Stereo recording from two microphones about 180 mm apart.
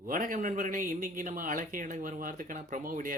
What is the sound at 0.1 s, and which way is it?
Speech, 50° right (ahead or behind).